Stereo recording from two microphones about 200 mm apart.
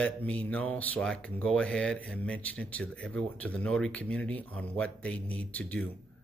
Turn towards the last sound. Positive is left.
turn(degrees=5)  # may be behind; listen again after turning